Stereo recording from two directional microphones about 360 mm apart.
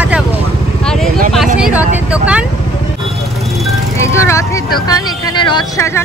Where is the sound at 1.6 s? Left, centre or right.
Centre.